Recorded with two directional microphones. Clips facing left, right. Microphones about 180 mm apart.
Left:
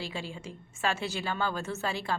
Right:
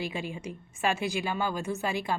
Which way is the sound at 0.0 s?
15° right (ahead or behind).